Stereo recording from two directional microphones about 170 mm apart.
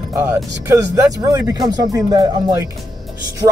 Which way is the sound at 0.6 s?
20° right (ahead or behind).